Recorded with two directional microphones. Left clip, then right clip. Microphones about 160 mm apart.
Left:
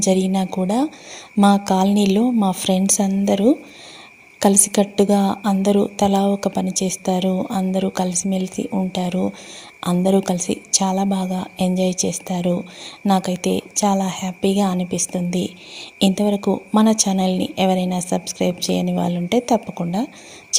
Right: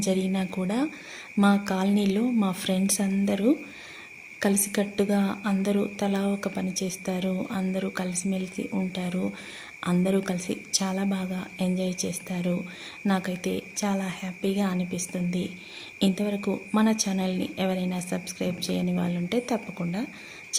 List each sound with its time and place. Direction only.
0.0 s a woman's voice: 30° left (ahead or behind)